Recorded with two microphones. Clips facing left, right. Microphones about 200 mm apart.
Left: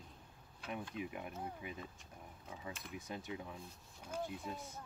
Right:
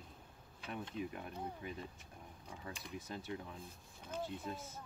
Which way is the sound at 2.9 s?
15° left (ahead or behind).